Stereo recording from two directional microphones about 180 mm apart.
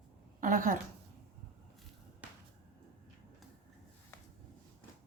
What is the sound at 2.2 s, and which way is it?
Whip, 10° right (ahead or behind).